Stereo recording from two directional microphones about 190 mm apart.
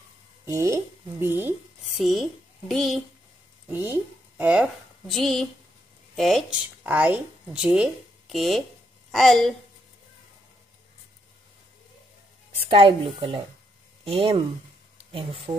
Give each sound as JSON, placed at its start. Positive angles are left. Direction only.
{"t": 0.5, "sound": "speech", "side_deg": -15}
{"t": 1.9, "sound": "speech", "side_deg": 0}
{"t": 3.6, "sound": "a woman's voice", "side_deg": -10}
{"t": 12.6, "sound": "a woman's voice", "side_deg": -30}